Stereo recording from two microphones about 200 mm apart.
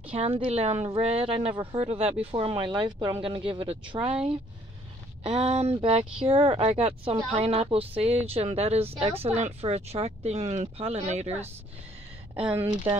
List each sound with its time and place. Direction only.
0.1 s speech: 25° right (ahead or behind)
12.4 s speech: 10° right (ahead or behind)